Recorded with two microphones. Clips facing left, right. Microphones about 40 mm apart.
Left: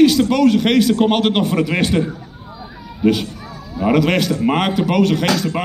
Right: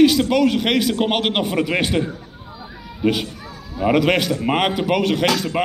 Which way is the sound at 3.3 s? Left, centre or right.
Centre.